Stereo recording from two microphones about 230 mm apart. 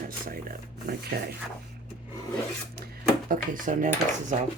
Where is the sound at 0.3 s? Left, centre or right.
Right.